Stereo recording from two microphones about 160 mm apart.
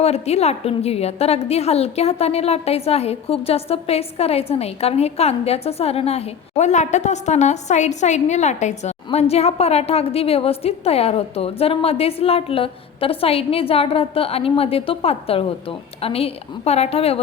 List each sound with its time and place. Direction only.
0.0 s a woman's voice: 40° left (ahead or behind)